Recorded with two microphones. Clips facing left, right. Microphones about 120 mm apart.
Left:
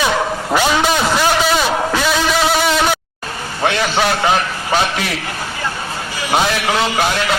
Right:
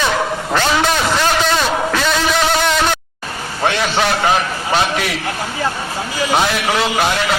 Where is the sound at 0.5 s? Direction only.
10° left (ahead or behind).